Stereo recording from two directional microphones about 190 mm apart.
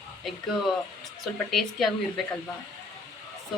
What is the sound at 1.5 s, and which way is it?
Speech, centre (ahead or behind).